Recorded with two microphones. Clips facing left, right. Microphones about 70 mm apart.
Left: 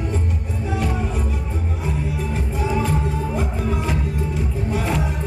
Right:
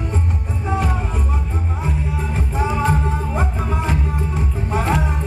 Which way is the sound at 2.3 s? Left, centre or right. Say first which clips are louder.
Right 3 dB; right.